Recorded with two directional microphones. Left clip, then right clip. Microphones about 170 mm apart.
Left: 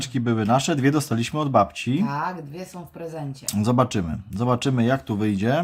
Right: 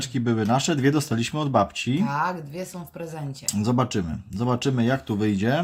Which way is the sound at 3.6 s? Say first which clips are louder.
Left 3 dB; 10° left (ahead or behind).